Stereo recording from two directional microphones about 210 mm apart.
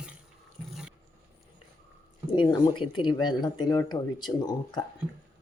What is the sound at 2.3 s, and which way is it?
Speech, 20° left (ahead or behind).